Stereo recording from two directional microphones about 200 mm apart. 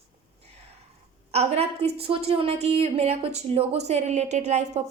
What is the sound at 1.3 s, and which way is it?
A woman's voice, 30° right (ahead or behind).